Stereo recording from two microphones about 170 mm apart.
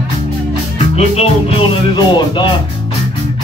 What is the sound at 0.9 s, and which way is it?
Music, 35° left (ahead or behind).